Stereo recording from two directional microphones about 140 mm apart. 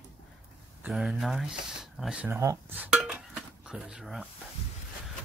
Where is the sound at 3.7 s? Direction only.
5° right (ahead or behind).